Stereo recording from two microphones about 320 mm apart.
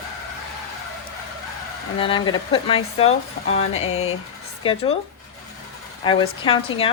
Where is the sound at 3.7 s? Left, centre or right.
Left.